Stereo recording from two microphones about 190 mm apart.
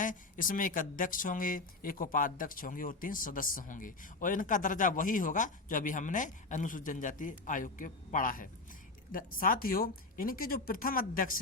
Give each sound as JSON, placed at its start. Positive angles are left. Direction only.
{"t": 0.0, "sound": "speech", "side_deg": 45}